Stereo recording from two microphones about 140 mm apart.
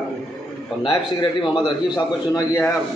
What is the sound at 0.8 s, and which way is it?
A man's voice, 35° left (ahead or behind).